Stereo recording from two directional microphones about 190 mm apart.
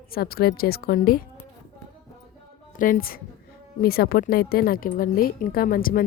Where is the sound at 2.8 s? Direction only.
50° left (ahead or behind).